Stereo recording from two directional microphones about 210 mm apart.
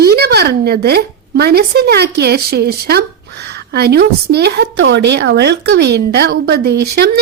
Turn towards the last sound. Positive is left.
turn(degrees=-50)  # may be behind; listen again after turning